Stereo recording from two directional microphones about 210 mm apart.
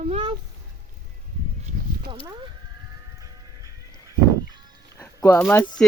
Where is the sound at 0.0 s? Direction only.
30° right (ahead or behind).